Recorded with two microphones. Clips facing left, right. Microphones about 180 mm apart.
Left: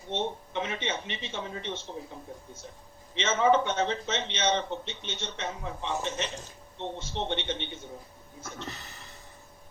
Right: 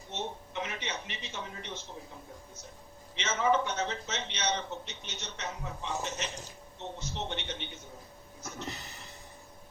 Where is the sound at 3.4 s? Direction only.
25° left (ahead or behind).